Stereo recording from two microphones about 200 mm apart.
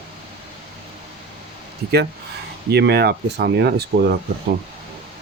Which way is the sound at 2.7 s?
55° right (ahead or behind).